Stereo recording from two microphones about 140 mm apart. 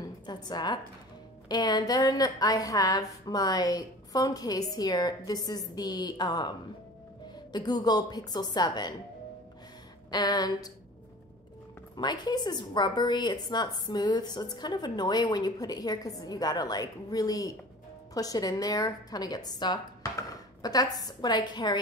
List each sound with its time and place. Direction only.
0.0 s a sound: 30° left (ahead or behind)
1.5 s a woman's voice: 30° left (ahead or behind)
7.5 s a woman's voice: 30° left (ahead or behind)
10.1 s a woman's voice: 30° left (ahead or behind)
12.0 s a woman's voice: 30° left (ahead or behind)